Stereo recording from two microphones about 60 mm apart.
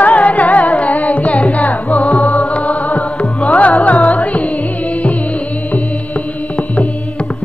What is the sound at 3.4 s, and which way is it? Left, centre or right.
Music, left.